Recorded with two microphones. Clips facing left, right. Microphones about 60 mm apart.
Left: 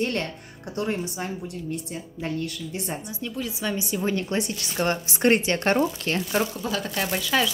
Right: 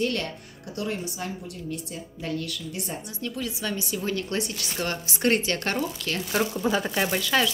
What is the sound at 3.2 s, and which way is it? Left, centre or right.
A woman's voice, centre.